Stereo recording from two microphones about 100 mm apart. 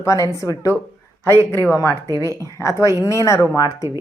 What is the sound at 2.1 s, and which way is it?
Speech, 35° right (ahead or behind).